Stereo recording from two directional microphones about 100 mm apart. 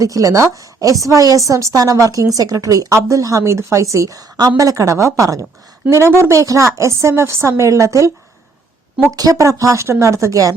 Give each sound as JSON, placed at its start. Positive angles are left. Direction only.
{"t": 0.0, "sound": "a woman's voice", "side_deg": -35}
{"t": 9.1, "sound": "speech", "side_deg": -35}